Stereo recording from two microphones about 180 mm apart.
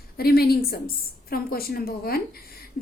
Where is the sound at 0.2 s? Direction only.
60° left (ahead or behind).